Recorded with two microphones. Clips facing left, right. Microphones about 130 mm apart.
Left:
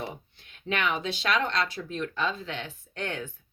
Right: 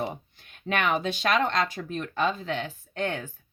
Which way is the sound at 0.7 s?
45° right (ahead or behind).